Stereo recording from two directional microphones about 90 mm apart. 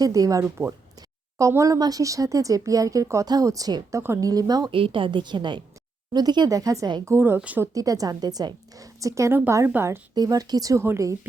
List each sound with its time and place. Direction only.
0.0 s speech: 40° right (ahead or behind)
3.9 s speech: 30° right (ahead or behind)
4.3 s speech: 45° right (ahead or behind)
4.7 s a woman's voice: 75° right (ahead or behind); by 7.0 s 45° right (ahead or behind)
7.0 s a woman's voice: 30° right (ahead or behind)
7.6 s speech: 40° right (ahead or behind)
9.7 s a woman's voice: 20° right (ahead or behind)
10.2 s speech: 45° right (ahead or behind)